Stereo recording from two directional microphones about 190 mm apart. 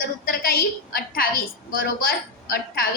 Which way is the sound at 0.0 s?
50° left (ahead or behind).